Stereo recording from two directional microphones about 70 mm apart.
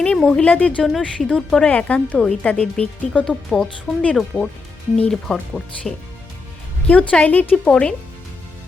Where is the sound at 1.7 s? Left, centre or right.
Left.